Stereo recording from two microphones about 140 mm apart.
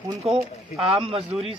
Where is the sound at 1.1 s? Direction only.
40° right (ahead or behind).